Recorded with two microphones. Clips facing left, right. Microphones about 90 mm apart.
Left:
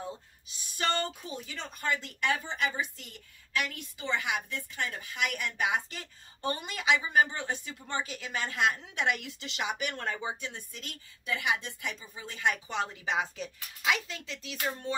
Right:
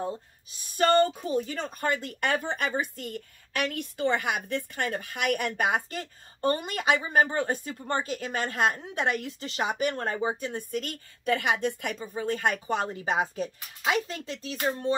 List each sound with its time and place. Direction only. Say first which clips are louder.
0.0 s speech: right 7 dB; 40° right (ahead or behind)